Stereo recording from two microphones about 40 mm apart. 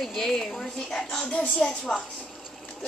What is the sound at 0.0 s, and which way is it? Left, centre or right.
A woman's voice, centre.